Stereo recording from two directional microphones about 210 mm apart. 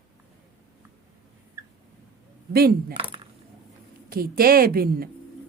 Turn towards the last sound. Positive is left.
turn(degrees=-45)  # may be behind; listen again after turning